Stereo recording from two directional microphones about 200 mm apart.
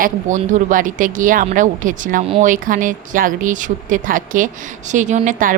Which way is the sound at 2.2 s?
30° right (ahead or behind).